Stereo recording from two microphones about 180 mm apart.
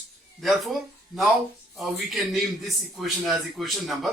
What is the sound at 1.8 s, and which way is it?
A man's voice, centre (ahead or behind).